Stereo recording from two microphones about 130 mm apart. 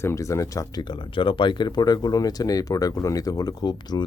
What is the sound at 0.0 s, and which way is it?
Speech, 20° left (ahead or behind).